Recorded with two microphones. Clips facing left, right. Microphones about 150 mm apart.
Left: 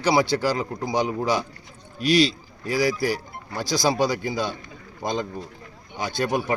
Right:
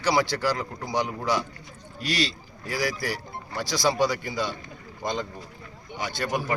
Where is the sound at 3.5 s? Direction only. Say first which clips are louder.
Left 3 dB; 40° left (ahead or behind).